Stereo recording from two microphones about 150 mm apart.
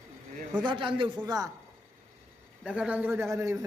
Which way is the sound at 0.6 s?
35° right (ahead or behind).